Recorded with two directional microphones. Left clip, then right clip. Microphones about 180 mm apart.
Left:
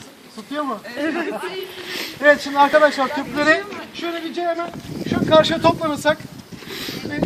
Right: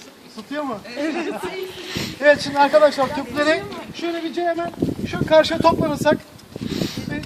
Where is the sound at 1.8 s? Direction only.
Centre (ahead or behind).